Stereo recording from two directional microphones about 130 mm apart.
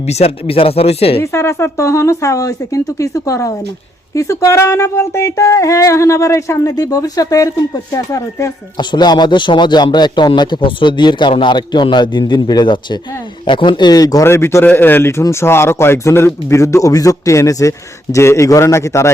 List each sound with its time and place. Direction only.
0.0 s speech: 55° left (ahead or behind)
1.2 s a man's voice: 20° left (ahead or behind)
8.8 s a man's voice: 35° left (ahead or behind)